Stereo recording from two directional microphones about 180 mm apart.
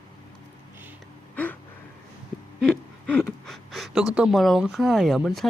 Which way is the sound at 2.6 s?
5° left (ahead or behind).